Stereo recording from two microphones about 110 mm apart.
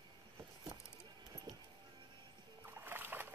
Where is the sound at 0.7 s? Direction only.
40° right (ahead or behind).